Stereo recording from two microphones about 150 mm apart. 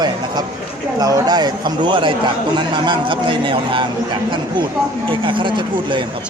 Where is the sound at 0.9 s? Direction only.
25° right (ahead or behind).